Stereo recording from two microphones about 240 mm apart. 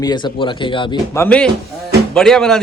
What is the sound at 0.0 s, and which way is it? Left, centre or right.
Speech, centre.